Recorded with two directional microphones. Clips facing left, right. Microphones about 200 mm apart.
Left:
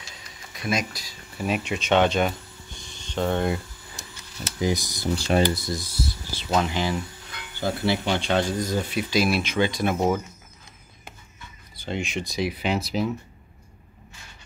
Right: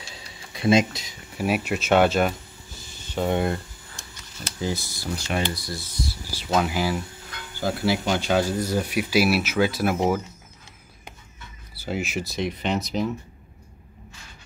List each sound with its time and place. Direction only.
0.0 s a sound: 30° right (ahead or behind)
1.3 s speech: 5° right (ahead or behind)
4.6 s speech: 15° left (ahead or behind)
5.1 s speech: 25° left (ahead or behind)
6.3 s speech: 5° right (ahead or behind)
11.7 s speech: 5° right (ahead or behind)